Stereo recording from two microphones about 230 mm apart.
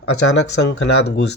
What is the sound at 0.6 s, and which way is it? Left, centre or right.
Speech, left.